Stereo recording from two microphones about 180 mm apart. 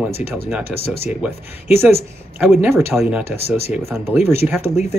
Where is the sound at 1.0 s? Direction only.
5° right (ahead or behind).